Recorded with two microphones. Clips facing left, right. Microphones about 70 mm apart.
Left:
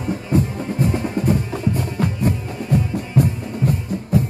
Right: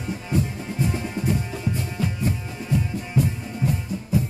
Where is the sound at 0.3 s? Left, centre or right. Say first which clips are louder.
Left 5 dB; left.